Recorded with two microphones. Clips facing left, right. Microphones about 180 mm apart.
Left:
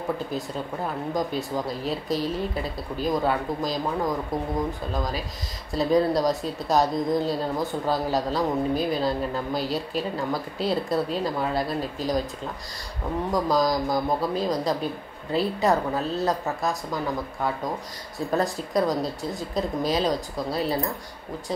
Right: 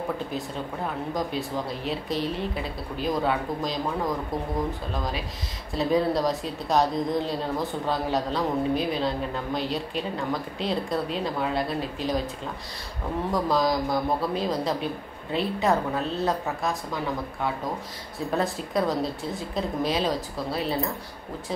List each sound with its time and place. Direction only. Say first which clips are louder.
1.1 s a woman's voice: left 3 dB; centre (ahead or behind)
5.7 s a woman's voice: left 2 dB; centre (ahead or behind)
13.3 s a woman's voice: left 1 dB; centre (ahead or behind)